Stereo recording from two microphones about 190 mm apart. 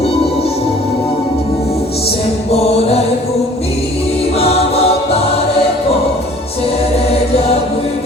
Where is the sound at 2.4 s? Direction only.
30° left (ahead or behind).